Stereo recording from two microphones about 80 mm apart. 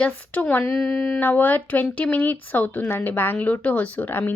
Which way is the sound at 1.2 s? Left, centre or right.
Left.